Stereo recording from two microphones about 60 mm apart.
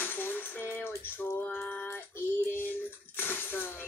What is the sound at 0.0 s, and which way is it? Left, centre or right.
Cutlery, left.